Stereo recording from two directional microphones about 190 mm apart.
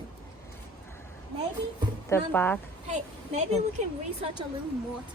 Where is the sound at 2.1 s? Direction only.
10° left (ahead or behind).